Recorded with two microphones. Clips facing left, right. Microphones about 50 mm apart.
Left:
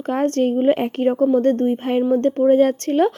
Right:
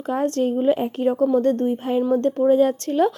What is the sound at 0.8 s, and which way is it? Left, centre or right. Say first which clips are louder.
Speech: left 2 dB; left.